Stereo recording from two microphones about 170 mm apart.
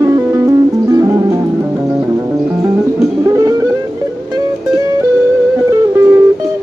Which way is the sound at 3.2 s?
20° right (ahead or behind).